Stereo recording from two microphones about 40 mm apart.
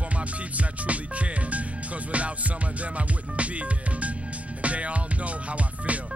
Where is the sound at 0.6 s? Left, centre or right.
Right.